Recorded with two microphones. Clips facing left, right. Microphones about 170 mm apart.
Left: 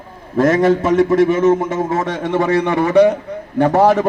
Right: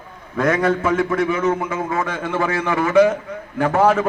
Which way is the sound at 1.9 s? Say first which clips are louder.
Left 4 dB; 40° left (ahead or behind).